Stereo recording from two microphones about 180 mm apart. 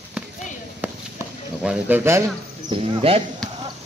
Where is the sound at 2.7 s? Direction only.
30° right (ahead or behind).